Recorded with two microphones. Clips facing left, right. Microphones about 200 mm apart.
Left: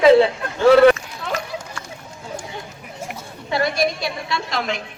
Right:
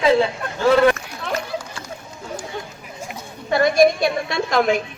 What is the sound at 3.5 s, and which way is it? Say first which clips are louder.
A woman's voice: right 6 dB; 50° right (ahead or behind).